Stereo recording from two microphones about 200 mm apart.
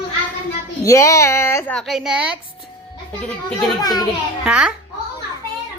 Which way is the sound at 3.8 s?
20° left (ahead or behind).